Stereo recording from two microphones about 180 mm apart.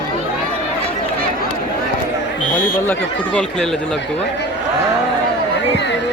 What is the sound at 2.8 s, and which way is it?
Speech, 10° left (ahead or behind).